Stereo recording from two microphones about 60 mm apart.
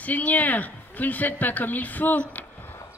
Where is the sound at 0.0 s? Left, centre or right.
Left.